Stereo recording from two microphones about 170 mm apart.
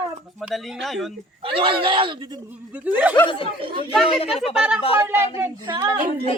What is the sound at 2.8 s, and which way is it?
Speech, 10° right (ahead or behind).